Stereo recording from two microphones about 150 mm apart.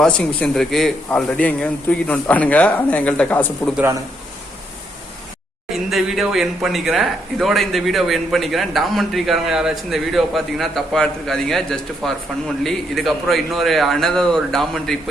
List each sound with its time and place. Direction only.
0.0 s a man's voice: 5° left (ahead or behind)
5.7 s speech: centre (ahead or behind)